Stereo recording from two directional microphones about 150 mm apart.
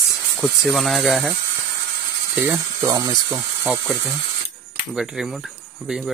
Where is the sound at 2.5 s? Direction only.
25° right (ahead or behind).